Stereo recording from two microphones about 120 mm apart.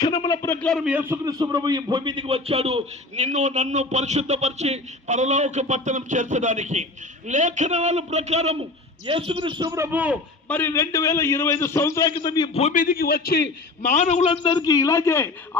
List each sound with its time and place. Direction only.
0.0 s a man's voice: 35° left (ahead or behind)
0.4 s a man's voice: 15° left (ahead or behind)
0.9 s a man's voice: 15° right (ahead or behind)
1.2 s a man's voice: 30° right (ahead or behind); by 8.6 s 65° right (ahead or behind)
9.0 s a man's voice: 50° right (ahead or behind)
9.8 s a man's voice: 10° right (ahead or behind)
10.5 s a man's voice: 20° left (ahead or behind)
12.1 s speech: 35° left (ahead or behind)
12.5 s a man's voice: 80° left
14.0 s a man's voice: 75° left (ahead or behind)
14.3 s speech: 40° left (ahead or behind)
14.7 s a man's voice: 25° left (ahead or behind)